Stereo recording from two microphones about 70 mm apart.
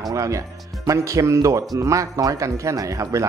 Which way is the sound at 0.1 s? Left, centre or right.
Right.